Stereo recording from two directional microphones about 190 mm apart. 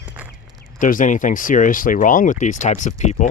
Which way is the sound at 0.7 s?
45° left (ahead or behind).